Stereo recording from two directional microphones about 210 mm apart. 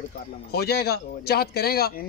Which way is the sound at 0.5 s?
50° left (ahead or behind).